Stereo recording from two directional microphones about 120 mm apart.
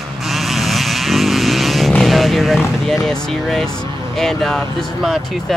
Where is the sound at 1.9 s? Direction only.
5° left (ahead or behind).